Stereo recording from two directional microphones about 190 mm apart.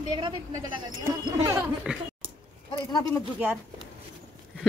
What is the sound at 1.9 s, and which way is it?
Speech, 5° right (ahead or behind).